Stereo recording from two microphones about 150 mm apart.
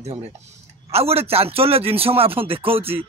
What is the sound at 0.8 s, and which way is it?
A man's voice, 40° right (ahead or behind).